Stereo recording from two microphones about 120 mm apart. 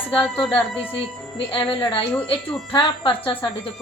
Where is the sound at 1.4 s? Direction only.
45° left (ahead or behind).